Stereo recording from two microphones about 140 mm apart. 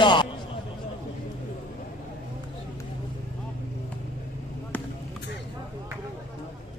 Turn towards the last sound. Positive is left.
turn(degrees=15)  # may be behind; listen again after turning